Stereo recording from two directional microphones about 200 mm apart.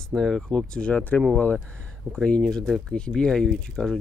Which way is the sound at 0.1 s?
Centre (ahead or behind).